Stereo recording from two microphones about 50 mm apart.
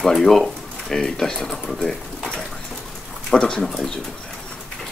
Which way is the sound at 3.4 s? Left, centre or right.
Centre.